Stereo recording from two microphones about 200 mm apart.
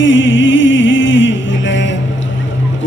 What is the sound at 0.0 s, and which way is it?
Music, 70° left (ahead or behind).